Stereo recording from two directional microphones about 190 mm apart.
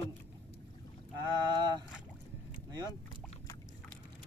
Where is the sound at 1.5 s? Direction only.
20° right (ahead or behind).